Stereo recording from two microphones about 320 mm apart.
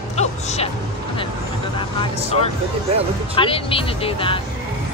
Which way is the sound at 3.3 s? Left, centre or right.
Centre.